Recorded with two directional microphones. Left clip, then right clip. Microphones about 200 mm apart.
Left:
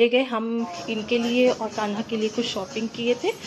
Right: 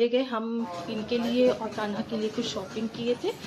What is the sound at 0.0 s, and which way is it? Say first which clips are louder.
A woman's voice: left 5 dB; 5° left (ahead or behind).